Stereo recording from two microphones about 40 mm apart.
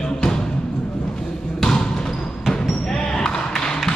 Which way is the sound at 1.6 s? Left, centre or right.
Centre.